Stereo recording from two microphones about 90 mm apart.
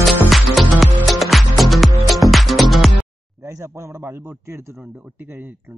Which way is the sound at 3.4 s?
35° right (ahead or behind).